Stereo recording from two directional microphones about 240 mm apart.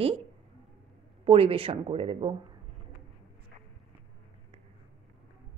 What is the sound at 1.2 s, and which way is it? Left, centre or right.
A woman's voice, right.